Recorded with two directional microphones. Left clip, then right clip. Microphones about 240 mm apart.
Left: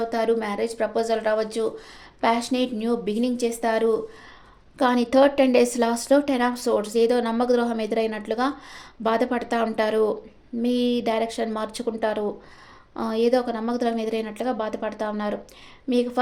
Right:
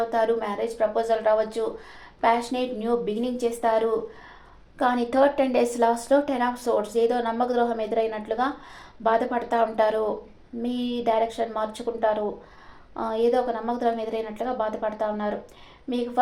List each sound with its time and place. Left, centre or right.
0.1 s speech: left